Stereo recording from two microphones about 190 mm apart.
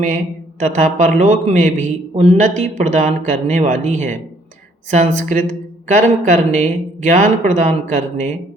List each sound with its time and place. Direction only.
0.6 s a man's voice: 40° right (ahead or behind)